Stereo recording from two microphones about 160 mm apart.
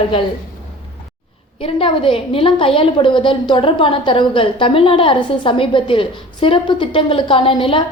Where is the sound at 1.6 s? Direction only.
35° left (ahead or behind).